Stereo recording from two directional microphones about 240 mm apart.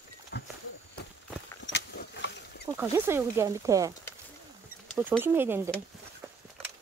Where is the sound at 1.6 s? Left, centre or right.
Left.